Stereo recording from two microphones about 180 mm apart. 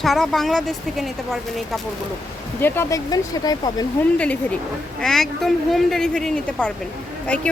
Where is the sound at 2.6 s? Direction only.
10° left (ahead or behind).